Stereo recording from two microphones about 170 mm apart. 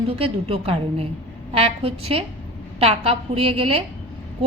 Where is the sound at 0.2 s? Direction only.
35° right (ahead or behind).